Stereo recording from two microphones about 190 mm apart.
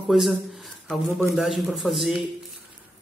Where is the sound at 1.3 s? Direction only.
Centre (ahead or behind).